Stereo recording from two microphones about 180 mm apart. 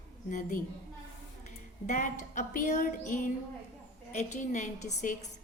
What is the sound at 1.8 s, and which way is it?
A woman's voice, 40° left (ahead or behind).